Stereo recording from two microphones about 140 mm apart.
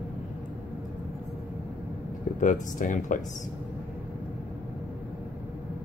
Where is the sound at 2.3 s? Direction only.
70° left (ahead or behind).